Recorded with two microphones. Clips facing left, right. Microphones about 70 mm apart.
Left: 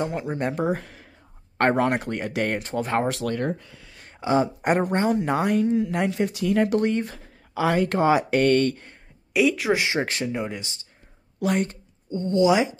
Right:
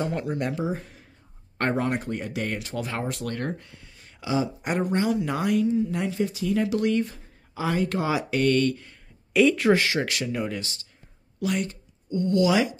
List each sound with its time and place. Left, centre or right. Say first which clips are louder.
0.0 s speech: left 1 dB; centre
0.3 s speech: left 1 dB; left
0.6 s speech: left 4 dB; left
1.6 s speech: left 5 dB; left
2.4 s speech: left 4 dB; left
4.2 s speech: left 5 dB; left
5.7 s speech: left 2 dB; left
7.5 s speech: left 4 dB; left
8.0 s speech: left 8 dB; left
9.3 s speech: right 2 dB; centre
9.8 s speech: left 1 dB; left
11.4 s speech: left 3 dB; left